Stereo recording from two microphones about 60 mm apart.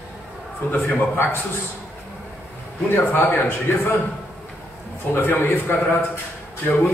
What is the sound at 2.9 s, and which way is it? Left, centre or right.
A man's voice, left.